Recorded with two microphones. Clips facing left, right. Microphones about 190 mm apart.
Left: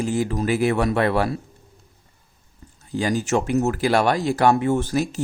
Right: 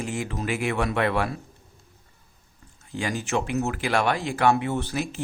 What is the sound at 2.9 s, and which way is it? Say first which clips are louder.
Speech: left 6 dB; 35° left (ahead or behind).